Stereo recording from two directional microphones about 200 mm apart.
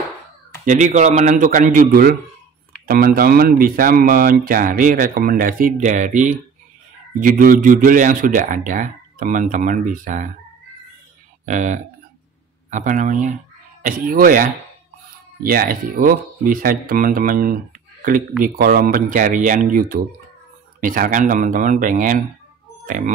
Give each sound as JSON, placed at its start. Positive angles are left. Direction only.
{"t": 0.7, "sound": "speech", "side_deg": -35}
{"t": 11.4, "sound": "speech", "side_deg": -40}